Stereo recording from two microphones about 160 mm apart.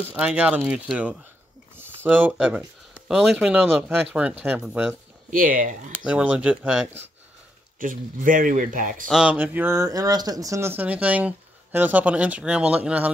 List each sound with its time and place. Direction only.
0.1 s speech: 5° right (ahead or behind)
5.3 s speech: 60° right (ahead or behind)
6.0 s speech: 5° right (ahead or behind)
7.8 s speech: 60° right (ahead or behind)
9.0 s speech: 5° right (ahead or behind)